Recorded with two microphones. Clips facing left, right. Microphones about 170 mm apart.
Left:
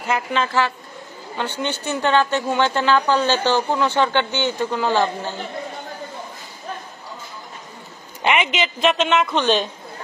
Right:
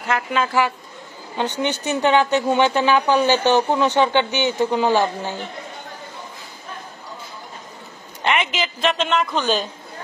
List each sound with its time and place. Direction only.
0.1 s a woman's voice: 5° right (ahead or behind)
8.2 s speech: 5° left (ahead or behind)